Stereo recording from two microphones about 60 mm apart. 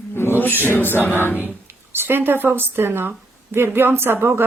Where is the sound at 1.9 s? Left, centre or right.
Right.